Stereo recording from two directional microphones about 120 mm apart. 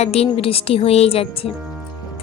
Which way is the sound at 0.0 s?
60° left (ahead or behind).